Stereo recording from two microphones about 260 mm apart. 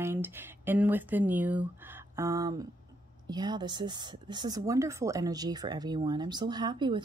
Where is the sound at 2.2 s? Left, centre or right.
Centre.